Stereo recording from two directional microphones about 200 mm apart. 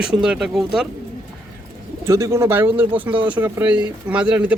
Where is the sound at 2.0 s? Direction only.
15° right (ahead or behind).